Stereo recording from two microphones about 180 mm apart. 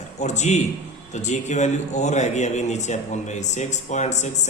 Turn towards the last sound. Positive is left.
turn(degrees=40)  # may be behind; listen again after turning